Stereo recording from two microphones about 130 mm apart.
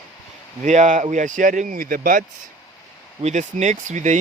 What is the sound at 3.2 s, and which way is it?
Speech, 65° right (ahead or behind).